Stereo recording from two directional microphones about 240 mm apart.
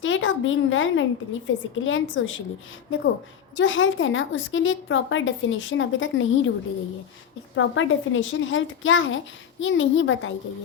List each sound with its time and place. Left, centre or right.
0.0 s a woman's voice: left
3.6 s a woman's voice: left
7.5 s a woman's voice: left